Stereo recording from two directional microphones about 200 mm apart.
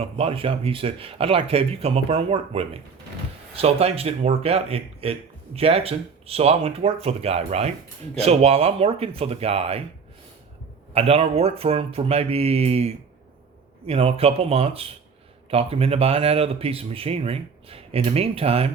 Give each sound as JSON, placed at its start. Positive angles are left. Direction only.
{"t": 0.0, "sound": "speech", "side_deg": -30}
{"t": 10.9, "sound": "speech", "side_deg": -30}